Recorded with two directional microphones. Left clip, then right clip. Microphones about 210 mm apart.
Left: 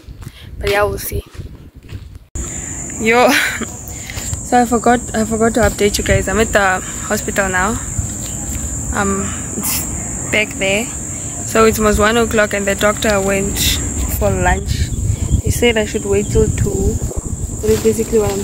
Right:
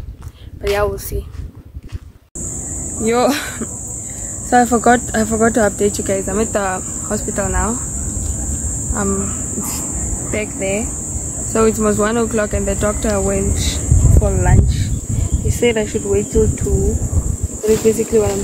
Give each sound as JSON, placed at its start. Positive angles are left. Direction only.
{"t": 0.6, "sound": "speech", "side_deg": 0}
{"t": 3.0, "sound": "speech", "side_deg": 0}
{"t": 9.0, "sound": "speech", "side_deg": 0}
{"t": 10.3, "sound": "speech", "side_deg": 5}
{"t": 17.6, "sound": "speech", "side_deg": 40}
{"t": 17.9, "sound": "speech", "side_deg": 0}